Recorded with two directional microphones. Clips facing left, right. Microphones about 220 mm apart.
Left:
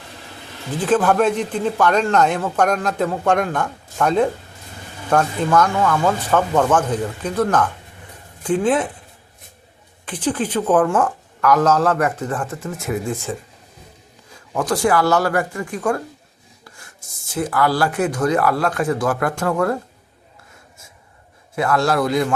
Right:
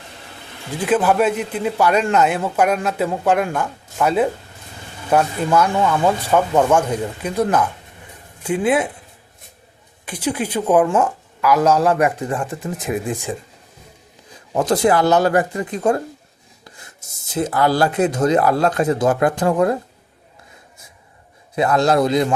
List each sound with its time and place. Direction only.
0.8 s speech: 10° right (ahead or behind)
10.1 s speech: 10° right (ahead or behind)
14.5 s speech: 20° right (ahead or behind)
21.5 s speech: 20° right (ahead or behind)